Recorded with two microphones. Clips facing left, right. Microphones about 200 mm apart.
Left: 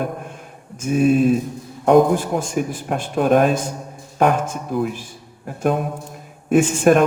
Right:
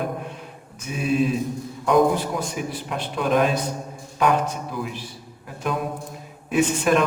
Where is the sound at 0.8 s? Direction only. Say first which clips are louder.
Left 7 dB; 50° left (ahead or behind).